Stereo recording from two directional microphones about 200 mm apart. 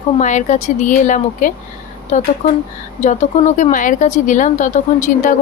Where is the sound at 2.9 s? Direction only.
35° left (ahead or behind).